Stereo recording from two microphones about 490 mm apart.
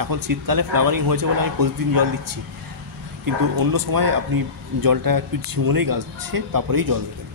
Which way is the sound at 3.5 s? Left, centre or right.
Right.